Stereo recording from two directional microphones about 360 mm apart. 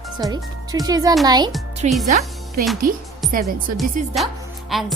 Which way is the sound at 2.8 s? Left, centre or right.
Right.